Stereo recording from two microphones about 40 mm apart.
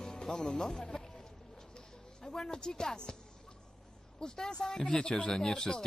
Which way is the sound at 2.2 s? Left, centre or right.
Centre.